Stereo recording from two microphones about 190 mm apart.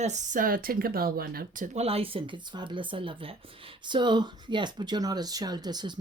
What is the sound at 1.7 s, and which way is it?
Speech, 30° right (ahead or behind).